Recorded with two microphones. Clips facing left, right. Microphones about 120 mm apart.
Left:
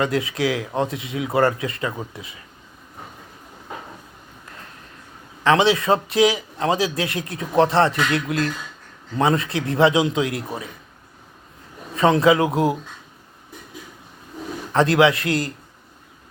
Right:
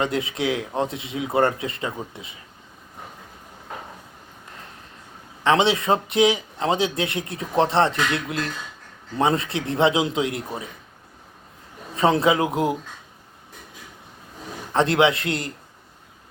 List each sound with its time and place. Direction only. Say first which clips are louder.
0.0 s a man's voice: left 2 dB; 25° right (ahead or behind)
5.4 s a man's voice: left 2 dB; 25° right (ahead or behind)
11.9 s a man's voice: left 3 dB; 30° right (ahead or behind)
12.4 s speech: left 3 dB; 30° left (ahead or behind)
14.7 s a man's voice: left 2 dB; 25° right (ahead or behind)